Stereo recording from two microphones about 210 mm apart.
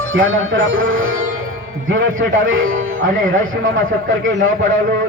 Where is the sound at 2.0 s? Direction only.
65° right (ahead or behind).